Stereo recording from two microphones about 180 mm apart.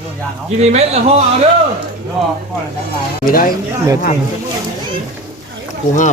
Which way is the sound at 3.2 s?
50° left (ahead or behind).